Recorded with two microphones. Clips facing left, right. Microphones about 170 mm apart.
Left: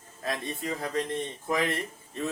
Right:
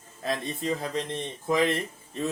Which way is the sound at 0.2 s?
25° right (ahead or behind).